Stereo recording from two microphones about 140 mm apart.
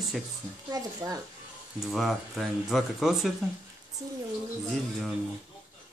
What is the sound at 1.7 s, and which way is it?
Speech, centre (ahead or behind).